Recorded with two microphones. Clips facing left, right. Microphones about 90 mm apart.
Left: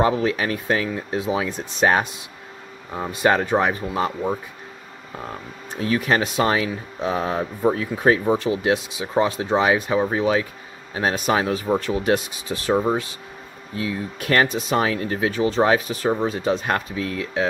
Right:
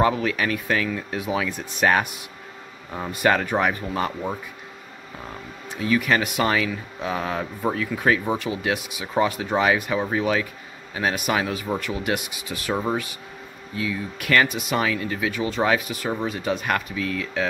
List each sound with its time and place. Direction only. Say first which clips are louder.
0.0 s speech: left 1 dB; 30° left (ahead or behind)
5.7 s speech: left 1 dB; 35° left (ahead or behind)
13.7 s speech: left 1 dB; 30° left (ahead or behind)